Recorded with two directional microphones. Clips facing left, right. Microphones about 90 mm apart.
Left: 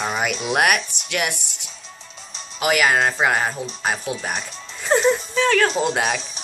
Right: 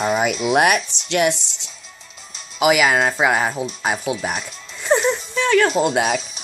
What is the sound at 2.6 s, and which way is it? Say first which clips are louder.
Speech: right 3 dB; 15° right (ahead or behind).